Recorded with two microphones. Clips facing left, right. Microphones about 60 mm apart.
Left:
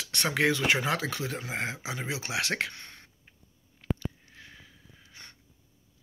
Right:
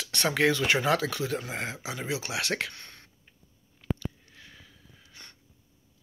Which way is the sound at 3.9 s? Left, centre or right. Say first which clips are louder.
Even; left.